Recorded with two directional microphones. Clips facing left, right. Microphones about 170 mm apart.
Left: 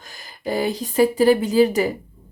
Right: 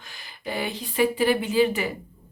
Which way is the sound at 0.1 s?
40° left (ahead or behind).